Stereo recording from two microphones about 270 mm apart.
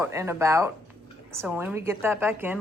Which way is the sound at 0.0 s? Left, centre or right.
Centre.